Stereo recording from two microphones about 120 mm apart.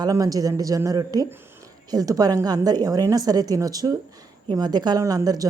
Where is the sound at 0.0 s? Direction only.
30° right (ahead or behind).